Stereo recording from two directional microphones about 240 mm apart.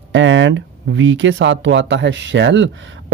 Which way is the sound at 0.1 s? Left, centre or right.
Right.